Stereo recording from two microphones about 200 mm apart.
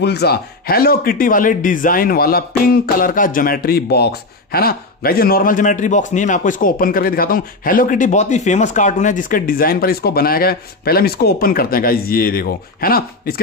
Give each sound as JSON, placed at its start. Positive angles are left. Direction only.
{"t": 0.0, "sound": "a man's voice", "side_deg": 55}